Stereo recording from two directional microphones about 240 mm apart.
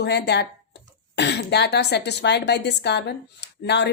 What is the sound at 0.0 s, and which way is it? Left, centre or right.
Speech, left.